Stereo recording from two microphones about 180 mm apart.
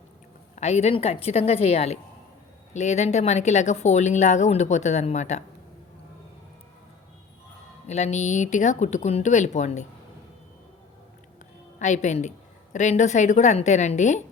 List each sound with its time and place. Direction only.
0.5 s speech: 40° left (ahead or behind)
7.9 s speech: 40° left (ahead or behind)
11.8 s speech: 40° left (ahead or behind)